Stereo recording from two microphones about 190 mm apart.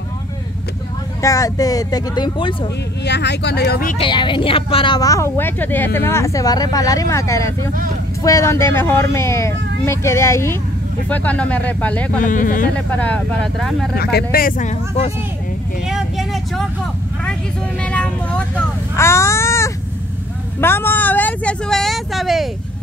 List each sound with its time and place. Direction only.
1.2 s speech: 20° left (ahead or behind)
3.1 s speech: 65° left (ahead or behind)
4.0 s speech: 25° left (ahead or behind); by 12.2 s 10° left (ahead or behind)
12.3 s speech: 45° left (ahead or behind)
12.7 s speech: 5° left (ahead or behind)
13.9 s speech: 50° left (ahead or behind)
15.9 s vehicle: centre (ahead or behind)
17.8 s vehicle: 5° left (ahead or behind)
18.9 s speech: 15° left (ahead or behind)